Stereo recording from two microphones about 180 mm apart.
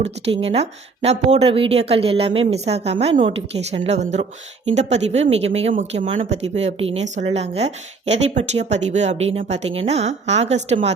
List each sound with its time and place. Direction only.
0.0 s speech: 30° right (ahead or behind)